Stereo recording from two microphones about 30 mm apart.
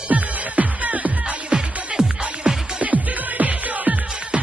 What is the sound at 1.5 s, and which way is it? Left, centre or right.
Music, right.